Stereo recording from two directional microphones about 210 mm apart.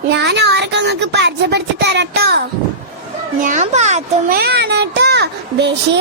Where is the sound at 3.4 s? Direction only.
35° right (ahead or behind).